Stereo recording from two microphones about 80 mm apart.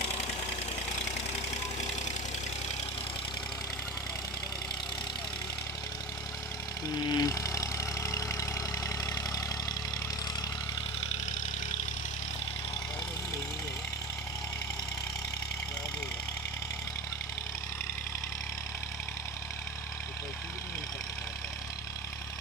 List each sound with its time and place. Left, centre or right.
7.1 s vehicle: left